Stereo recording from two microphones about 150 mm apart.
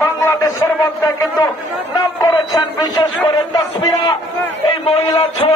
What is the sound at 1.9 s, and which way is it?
Speech, 25° left (ahead or behind).